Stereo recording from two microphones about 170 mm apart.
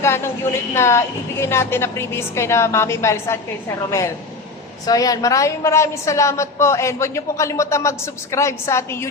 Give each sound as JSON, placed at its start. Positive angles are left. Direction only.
{"t": 0.0, "sound": "a sound", "side_deg": 15}
{"t": 0.7, "sound": "a woman's voice", "side_deg": 15}
{"t": 4.9, "sound": "a woman's voice", "side_deg": 20}